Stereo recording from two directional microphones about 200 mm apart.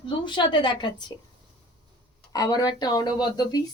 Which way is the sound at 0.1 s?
25° left (ahead or behind).